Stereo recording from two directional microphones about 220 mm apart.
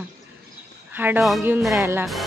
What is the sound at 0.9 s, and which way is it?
Speech, 10° right (ahead or behind).